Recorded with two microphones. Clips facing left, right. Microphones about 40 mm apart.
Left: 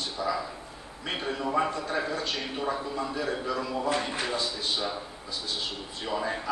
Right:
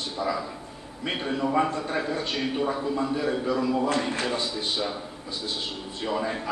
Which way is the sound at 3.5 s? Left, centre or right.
Centre.